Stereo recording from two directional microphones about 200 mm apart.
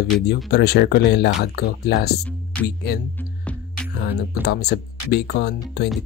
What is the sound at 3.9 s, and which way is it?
Speech, 55° left (ahead or behind).